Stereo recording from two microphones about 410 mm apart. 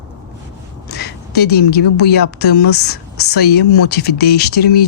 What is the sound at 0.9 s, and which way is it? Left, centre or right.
A woman's voice, left.